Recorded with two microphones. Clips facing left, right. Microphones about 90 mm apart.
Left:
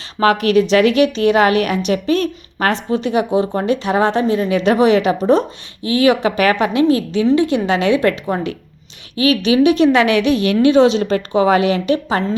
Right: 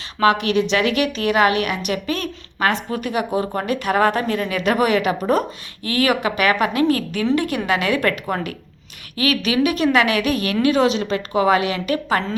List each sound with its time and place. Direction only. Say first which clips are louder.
0.2 s a woman's voice: left 4 dB; 40° left (ahead or behind)